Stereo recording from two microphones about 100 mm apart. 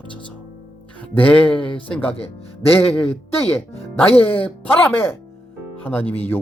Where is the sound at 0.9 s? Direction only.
15° left (ahead or behind).